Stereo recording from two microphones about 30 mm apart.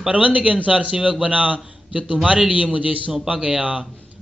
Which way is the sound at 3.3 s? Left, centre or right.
Right.